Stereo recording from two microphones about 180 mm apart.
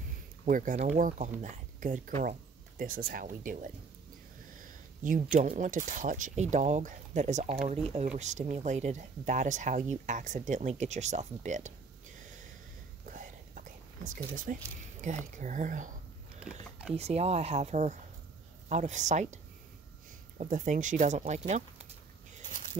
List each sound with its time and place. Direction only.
0.5 s speech: 45° right (ahead or behind)
4.6 s a sound: 50° right (ahead or behind)
5.6 s speech: 45° right (ahead or behind)
13.0 s whispering: 45° right (ahead or behind)
15.3 s speech: 45° right (ahead or behind)
16.9 s speech: 35° right (ahead or behind)